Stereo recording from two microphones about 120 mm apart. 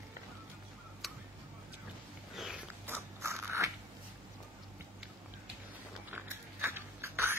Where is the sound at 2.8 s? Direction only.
20° right (ahead or behind).